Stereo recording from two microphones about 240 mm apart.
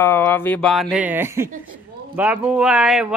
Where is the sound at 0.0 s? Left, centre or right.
Centre.